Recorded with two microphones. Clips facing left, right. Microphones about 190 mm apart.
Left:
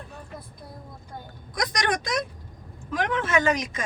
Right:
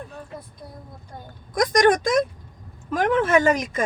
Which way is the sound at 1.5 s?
50° right (ahead or behind).